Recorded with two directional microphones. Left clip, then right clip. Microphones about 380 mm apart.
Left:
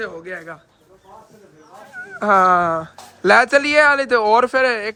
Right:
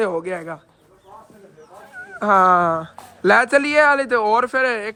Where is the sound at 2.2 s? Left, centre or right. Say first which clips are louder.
Even; centre.